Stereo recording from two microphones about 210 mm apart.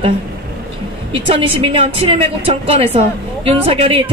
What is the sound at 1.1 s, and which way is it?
A woman's voice, 25° right (ahead or behind).